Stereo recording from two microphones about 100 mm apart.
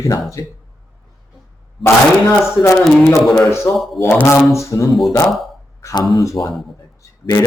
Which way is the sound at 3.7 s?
Centre (ahead or behind).